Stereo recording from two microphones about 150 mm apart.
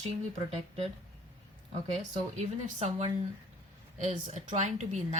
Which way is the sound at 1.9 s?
50° right (ahead or behind).